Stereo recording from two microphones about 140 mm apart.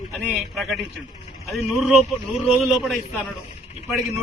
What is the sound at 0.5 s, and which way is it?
A man's voice, centre (ahead or behind).